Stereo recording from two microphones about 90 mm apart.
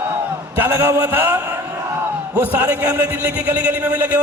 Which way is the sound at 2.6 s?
20° right (ahead or behind).